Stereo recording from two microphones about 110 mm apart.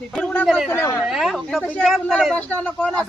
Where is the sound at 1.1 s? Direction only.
Centre (ahead or behind); by 2.9 s 15° left (ahead or behind).